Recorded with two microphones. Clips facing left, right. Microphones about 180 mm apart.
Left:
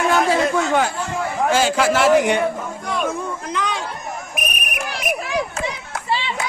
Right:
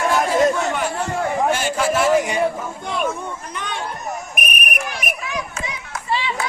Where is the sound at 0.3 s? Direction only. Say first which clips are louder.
Even; 90° left.